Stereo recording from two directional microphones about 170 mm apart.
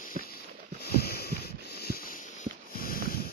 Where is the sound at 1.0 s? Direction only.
65° left (ahead or behind).